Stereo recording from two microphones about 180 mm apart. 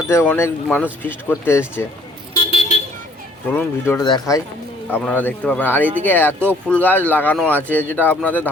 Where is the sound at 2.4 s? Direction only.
35° left (ahead or behind).